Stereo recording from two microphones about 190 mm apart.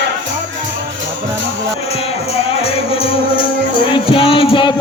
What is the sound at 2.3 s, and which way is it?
Music, 30° left (ahead or behind).